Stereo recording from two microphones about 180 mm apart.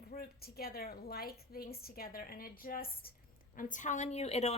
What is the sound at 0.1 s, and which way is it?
A woman's voice, 55° left (ahead or behind).